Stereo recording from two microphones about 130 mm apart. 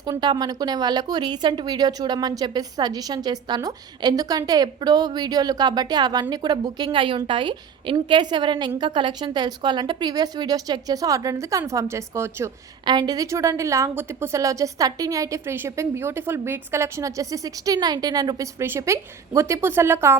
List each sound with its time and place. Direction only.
0.0 s speech: 30° right (ahead or behind)
12.8 s a woman's voice: 35° right (ahead or behind); by 20.1 s 20° right (ahead or behind)